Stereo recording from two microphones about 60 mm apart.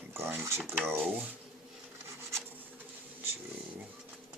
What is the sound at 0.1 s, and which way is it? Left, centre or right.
Speech, right.